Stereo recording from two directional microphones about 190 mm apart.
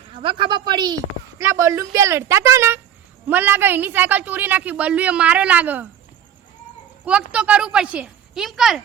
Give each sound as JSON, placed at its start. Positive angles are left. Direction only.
{"t": 0.1, "sound": "a woman's voice", "side_deg": -25}
{"t": 7.0, "sound": "a woman's voice", "side_deg": -5}